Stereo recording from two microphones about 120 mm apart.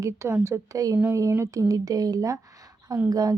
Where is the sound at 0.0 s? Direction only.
20° right (ahead or behind).